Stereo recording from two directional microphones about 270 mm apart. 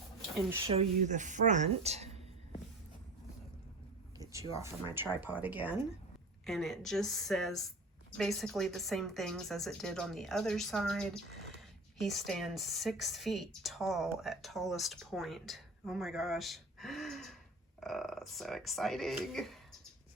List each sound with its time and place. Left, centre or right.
0.7 s a woman's voice: right
4.2 s a sound: centre
4.9 s a woman's voice: centre